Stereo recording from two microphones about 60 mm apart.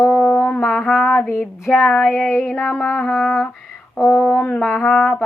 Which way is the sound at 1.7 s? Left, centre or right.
Left.